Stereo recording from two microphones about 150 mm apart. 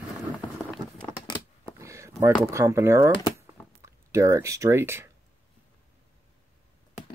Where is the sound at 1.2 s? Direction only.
30° left (ahead or behind).